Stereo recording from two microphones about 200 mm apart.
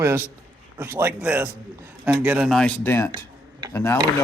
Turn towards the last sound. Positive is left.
turn(degrees=15)  # may be behind; listen again after turning